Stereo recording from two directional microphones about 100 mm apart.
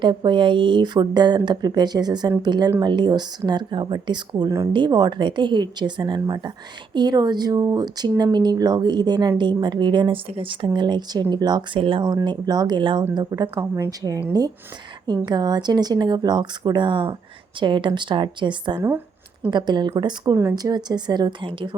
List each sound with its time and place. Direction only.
0.0 s speech: 50° right (ahead or behind)
10.2 s speech: 70° right (ahead or behind)
10.7 s speech: 50° right (ahead or behind)
11.8 s speech: 60° right (ahead or behind)
12.0 s speech: 45° right (ahead or behind)
13.6 s a woman's voice: 25° right (ahead or behind)
14.3 s speech: 40° right (ahead or behind)
18.8 s a sound: 20° right (ahead or behind)
19.5 s speech: 50° right (ahead or behind)
20.3 s a woman's voice: 30° right (ahead or behind)
20.6 s speech: 40° right (ahead or behind)